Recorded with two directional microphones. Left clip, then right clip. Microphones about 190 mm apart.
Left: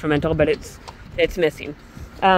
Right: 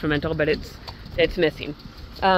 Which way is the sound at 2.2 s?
15° left (ahead or behind).